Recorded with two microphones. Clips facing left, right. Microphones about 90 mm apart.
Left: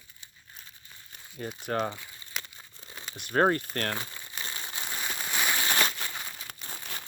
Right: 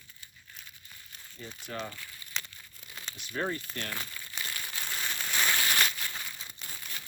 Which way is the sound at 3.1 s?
55° left (ahead or behind).